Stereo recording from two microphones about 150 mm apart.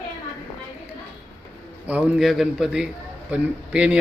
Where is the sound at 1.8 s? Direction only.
10° right (ahead or behind).